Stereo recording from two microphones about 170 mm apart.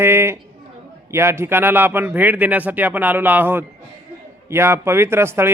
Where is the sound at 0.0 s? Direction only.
15° right (ahead or behind).